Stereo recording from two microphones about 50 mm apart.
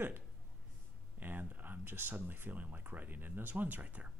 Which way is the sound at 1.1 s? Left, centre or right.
Right.